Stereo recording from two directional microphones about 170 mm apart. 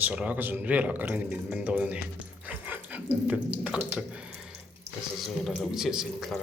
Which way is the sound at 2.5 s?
10° right (ahead or behind).